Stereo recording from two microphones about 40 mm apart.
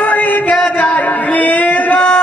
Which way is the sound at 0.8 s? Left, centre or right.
Left.